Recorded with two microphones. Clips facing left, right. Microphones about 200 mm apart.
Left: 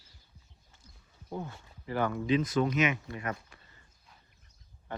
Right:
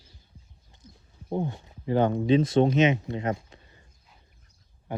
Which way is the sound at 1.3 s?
20° right (ahead or behind).